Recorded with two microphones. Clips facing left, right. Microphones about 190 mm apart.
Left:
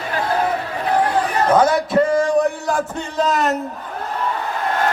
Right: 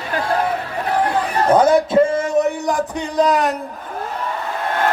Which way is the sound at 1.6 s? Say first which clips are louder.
Right 3 dB; 25° right (ahead or behind).